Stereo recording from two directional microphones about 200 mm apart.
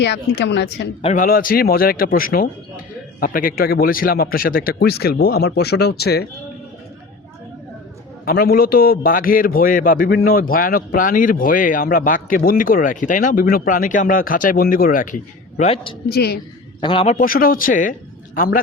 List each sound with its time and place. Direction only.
0.0 s a woman's voice: 60° left (ahead or behind)
1.0 s a man's voice: 40° left (ahead or behind)
8.2 s a man's voice: 50° left (ahead or behind); by 16.0 s 25° left (ahead or behind)
16.0 s a man's voice: 50° left (ahead or behind)
16.8 s a man's voice: 30° left (ahead or behind)
17.2 s a man's voice: 45° left (ahead or behind)